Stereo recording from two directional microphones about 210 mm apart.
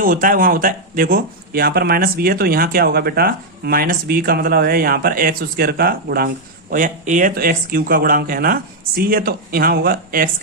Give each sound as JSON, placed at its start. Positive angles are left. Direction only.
{"t": 0.0, "sound": "speech", "side_deg": -40}